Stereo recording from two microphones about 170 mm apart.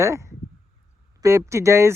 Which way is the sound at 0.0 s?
15° right (ahead or behind).